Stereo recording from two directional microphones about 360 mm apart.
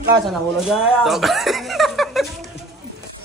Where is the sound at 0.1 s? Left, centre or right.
Centre.